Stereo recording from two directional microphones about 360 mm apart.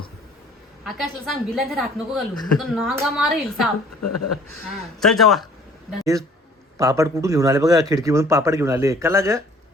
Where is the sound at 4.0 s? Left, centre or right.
Left.